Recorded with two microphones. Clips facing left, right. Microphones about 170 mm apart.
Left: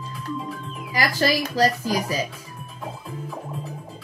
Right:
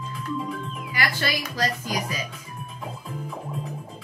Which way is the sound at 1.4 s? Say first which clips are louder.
Left 7 dB; 35° left (ahead or behind).